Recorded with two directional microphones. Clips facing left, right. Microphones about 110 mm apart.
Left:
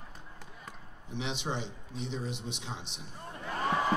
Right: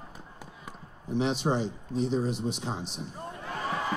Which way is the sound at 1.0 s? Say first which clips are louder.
Right 9 dB; 40° right (ahead or behind).